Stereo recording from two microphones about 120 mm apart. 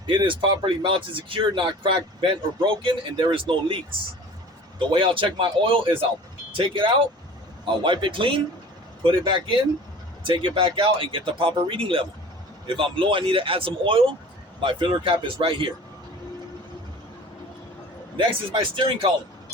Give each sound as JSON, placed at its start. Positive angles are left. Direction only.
{"t": 0.1, "sound": "speech", "side_deg": -45}
{"t": 4.8, "sound": "speech", "side_deg": -45}
{"t": 18.2, "sound": "speech", "side_deg": -45}